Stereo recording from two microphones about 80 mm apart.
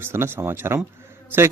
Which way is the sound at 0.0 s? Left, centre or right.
Right.